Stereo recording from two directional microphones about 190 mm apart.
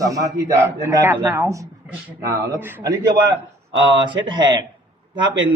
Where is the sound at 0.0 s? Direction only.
15° right (ahead or behind).